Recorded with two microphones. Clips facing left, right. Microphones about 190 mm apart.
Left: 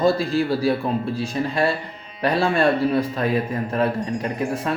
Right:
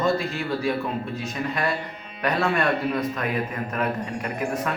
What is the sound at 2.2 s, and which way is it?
A man's voice, 30° left (ahead or behind).